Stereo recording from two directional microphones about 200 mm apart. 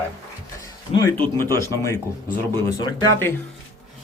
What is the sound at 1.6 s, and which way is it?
A man's voice, 15° left (ahead or behind).